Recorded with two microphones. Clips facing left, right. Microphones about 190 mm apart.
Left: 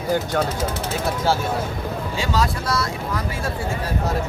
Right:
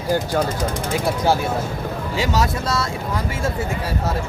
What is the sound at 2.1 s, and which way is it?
Speech, 20° right (ahead or behind).